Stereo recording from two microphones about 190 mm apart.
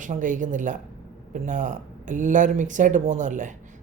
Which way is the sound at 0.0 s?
40° right (ahead or behind).